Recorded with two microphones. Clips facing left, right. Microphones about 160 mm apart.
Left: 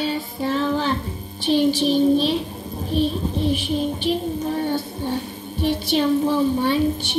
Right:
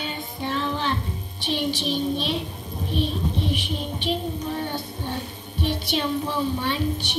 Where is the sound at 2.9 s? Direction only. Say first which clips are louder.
Left 5 dB; 40° left (ahead or behind).